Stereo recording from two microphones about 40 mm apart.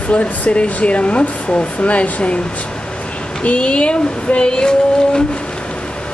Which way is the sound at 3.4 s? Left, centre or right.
Left.